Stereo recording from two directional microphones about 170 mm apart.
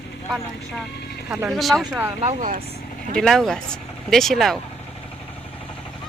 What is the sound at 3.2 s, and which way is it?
Speech, centre (ahead or behind).